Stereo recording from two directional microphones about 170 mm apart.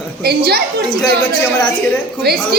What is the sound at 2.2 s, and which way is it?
Speech, 70° right (ahead or behind).